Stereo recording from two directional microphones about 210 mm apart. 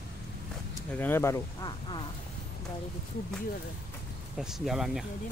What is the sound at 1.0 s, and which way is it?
Speech, 10° left (ahead or behind).